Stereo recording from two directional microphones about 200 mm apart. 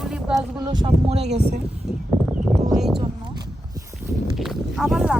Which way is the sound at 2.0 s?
5° right (ahead or behind).